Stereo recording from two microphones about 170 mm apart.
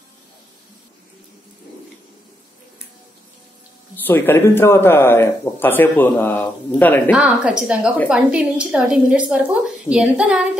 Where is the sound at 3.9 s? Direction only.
10° left (ahead or behind).